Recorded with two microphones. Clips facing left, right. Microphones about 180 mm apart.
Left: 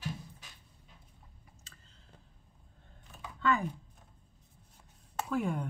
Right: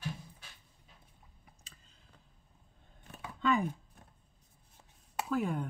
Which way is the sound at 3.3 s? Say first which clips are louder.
Even; 20° right (ahead or behind).